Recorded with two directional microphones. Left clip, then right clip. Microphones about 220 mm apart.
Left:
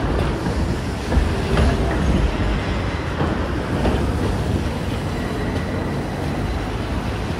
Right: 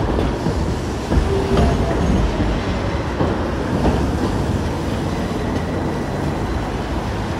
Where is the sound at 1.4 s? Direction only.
45° right (ahead or behind).